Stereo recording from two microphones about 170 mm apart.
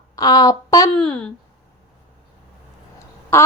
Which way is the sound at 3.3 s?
15° left (ahead or behind).